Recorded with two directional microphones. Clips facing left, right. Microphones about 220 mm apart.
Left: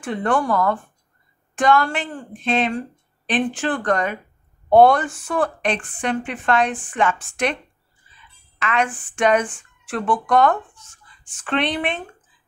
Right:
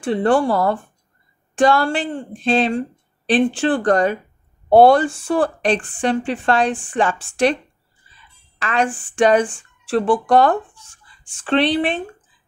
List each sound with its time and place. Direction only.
0.0 s speech: 30° right (ahead or behind)
8.0 s a sound: 35° right (ahead or behind)
8.5 s speech: 35° right (ahead or behind)